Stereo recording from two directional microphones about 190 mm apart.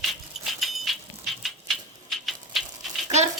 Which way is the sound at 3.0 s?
35° right (ahead or behind).